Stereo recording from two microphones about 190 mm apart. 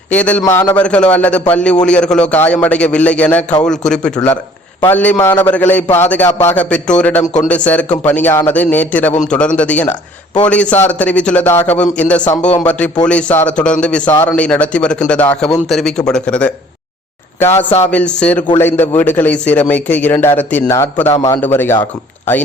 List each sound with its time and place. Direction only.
0.1 s a man's voice: 5° left (ahead or behind)
5.1 s a man's voice: 20° left (ahead or behind)
5.4 s a man's voice: 10° left (ahead or behind)